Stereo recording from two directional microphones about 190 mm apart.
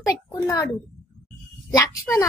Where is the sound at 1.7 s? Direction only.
15° left (ahead or behind).